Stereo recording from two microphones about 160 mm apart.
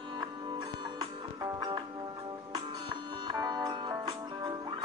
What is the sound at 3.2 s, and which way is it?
Music, 25° right (ahead or behind).